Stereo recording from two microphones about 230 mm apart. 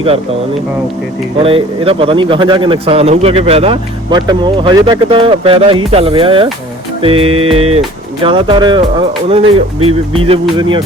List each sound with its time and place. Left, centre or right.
1.4 s a man's voice: right